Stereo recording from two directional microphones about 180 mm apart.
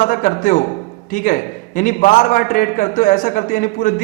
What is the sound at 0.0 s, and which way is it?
A man's voice, 50° left (ahead or behind).